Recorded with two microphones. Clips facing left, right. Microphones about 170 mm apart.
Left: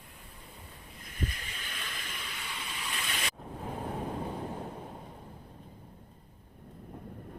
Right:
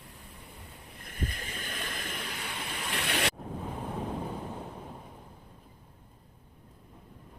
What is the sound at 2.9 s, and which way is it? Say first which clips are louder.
Waves: right 9 dB; 65° right (ahead or behind).